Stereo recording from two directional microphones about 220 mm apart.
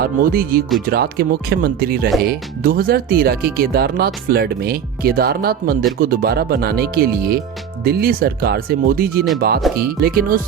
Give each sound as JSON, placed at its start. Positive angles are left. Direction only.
{"t": 0.0, "sound": "speech", "side_deg": -40}